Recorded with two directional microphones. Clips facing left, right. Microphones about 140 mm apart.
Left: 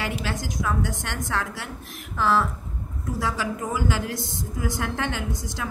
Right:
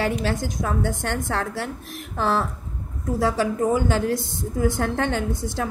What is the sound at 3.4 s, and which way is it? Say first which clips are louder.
A woman's voice: right 6 dB; 45° right (ahead or behind).